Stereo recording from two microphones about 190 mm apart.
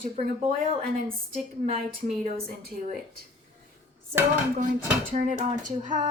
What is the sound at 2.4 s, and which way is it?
Speech, 50° right (ahead or behind).